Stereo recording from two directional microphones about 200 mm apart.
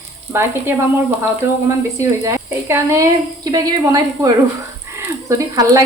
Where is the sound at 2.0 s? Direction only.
15° right (ahead or behind).